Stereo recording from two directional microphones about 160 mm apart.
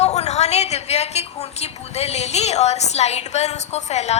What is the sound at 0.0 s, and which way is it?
A woman's voice, 45° left (ahead or behind).